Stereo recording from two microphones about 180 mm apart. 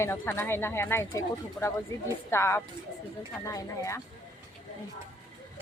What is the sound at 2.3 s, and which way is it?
A woman's voice, 15° left (ahead or behind).